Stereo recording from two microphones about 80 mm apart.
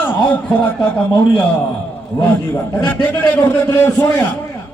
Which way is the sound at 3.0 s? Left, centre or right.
Centre.